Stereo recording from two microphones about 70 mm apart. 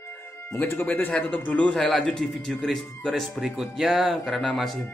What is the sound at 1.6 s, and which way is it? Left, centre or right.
Speech, centre.